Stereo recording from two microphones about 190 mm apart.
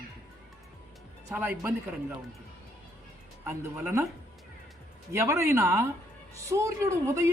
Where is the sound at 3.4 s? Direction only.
15° right (ahead or behind).